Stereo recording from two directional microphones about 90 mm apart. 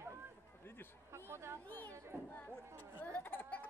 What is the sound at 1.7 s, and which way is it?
Speech, 20° left (ahead or behind).